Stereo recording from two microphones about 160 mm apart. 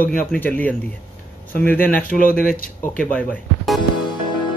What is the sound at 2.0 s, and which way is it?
Speech, 60° left (ahead or behind).